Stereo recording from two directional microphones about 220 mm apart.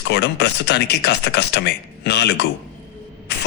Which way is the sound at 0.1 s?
50° left (ahead or behind).